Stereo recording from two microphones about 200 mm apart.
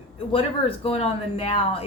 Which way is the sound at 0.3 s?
30° left (ahead or behind).